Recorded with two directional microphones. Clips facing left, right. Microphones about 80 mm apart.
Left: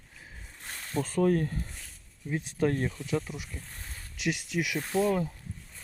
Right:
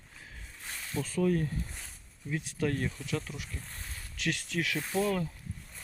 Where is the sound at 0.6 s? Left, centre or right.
Left.